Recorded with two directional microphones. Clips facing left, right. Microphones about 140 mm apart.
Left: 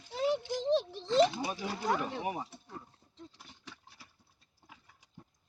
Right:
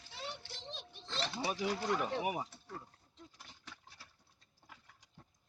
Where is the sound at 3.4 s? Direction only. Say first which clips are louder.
Left 3 dB; 5° left (ahead or behind).